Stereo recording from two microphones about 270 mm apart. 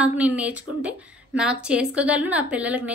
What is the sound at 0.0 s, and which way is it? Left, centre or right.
A woman's voice, centre.